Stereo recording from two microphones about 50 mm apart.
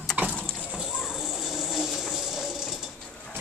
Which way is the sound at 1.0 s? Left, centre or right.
Centre.